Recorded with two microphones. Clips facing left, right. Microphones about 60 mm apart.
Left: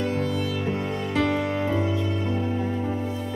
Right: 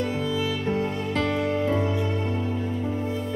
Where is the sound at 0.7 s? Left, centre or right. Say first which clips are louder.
Right 1 dB; centre.